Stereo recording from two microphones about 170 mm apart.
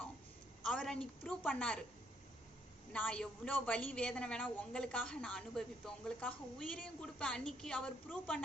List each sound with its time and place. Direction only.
0.6 s a woman's voice: 5° left (ahead or behind)
2.9 s a woman's voice: 5° left (ahead or behind)